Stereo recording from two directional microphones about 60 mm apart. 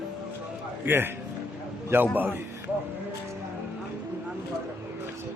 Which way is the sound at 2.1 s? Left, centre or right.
Right.